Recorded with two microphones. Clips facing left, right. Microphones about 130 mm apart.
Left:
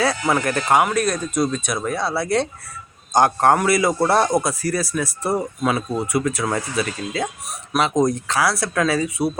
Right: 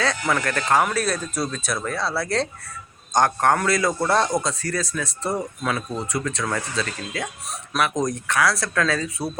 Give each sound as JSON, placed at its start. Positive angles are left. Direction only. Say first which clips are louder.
{"t": 0.3, "sound": "a man's voice", "louder": "left 1 dB", "side_deg": 20}
{"t": 2.2, "sound": "speech", "louder": "left 4 dB", "side_deg": 0}
{"t": 3.2, "sound": "a man's voice", "louder": "left 4 dB", "side_deg": 20}
{"t": 4.6, "sound": "a man's voice", "louder": "left 4 dB", "side_deg": 10}